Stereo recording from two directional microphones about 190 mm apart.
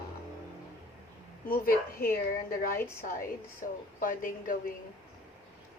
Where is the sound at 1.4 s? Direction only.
50° left (ahead or behind).